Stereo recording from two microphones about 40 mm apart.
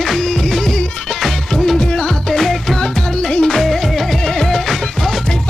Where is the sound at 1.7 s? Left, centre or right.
Left.